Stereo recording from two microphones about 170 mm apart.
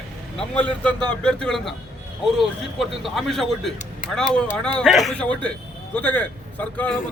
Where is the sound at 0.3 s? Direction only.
5° left (ahead or behind).